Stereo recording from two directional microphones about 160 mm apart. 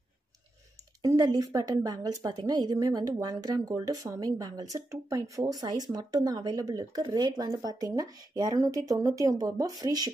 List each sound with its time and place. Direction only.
1.0 s speech: 20° right (ahead or behind)